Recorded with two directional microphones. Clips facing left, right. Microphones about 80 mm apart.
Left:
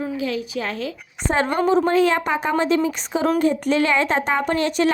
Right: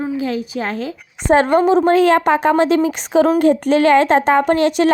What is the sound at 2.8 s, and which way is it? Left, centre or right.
Speech, right.